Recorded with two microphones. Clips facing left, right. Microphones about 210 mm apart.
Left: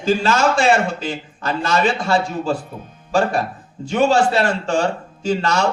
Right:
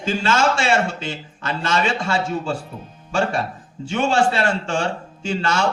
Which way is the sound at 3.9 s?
40° left (ahead or behind).